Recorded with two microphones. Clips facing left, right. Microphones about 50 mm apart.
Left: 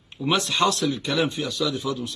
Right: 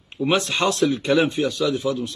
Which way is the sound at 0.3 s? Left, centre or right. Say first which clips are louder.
Right 1 dB; right.